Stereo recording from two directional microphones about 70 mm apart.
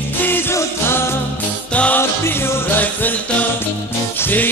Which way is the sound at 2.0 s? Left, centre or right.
Left.